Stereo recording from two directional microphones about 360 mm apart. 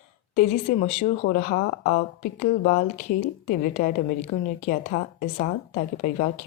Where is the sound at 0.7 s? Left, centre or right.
Left.